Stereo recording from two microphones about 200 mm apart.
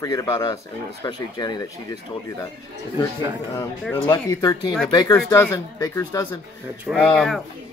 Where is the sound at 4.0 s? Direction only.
20° left (ahead or behind).